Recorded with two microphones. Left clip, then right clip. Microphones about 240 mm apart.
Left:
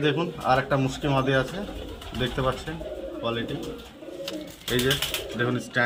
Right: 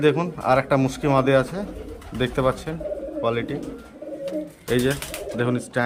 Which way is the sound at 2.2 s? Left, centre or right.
Centre.